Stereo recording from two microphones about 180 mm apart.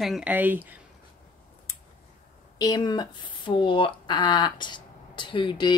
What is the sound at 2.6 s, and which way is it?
A woman's voice, 20° left (ahead or behind).